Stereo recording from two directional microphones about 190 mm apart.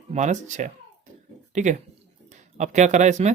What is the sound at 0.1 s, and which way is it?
Speech, 40° right (ahead or behind).